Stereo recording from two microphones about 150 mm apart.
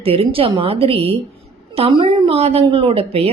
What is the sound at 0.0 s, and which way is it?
Speech, 40° right (ahead or behind).